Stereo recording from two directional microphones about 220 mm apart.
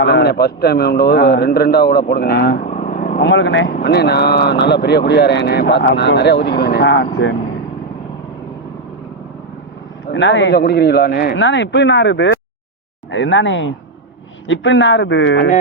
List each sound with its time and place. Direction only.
0.0 s speech: 50° left (ahead or behind)
2.6 s vehicle: 35° left (ahead or behind)
3.2 s speech: 55° left (ahead or behind)
10.1 s speech: 55° left (ahead or behind)